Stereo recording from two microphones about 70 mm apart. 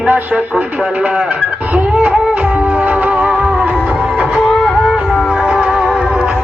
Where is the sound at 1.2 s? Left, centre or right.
Right.